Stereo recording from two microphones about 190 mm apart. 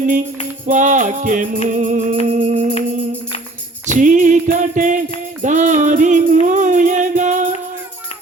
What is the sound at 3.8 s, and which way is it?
Music, 40° right (ahead or behind).